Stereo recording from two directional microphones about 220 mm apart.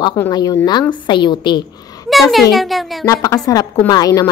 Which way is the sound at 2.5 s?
Centre (ahead or behind).